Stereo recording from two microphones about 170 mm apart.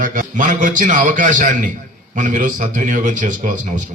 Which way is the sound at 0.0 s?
50° right (ahead or behind).